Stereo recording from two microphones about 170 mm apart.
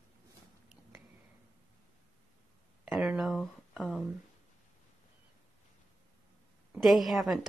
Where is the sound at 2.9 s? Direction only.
Centre (ahead or behind).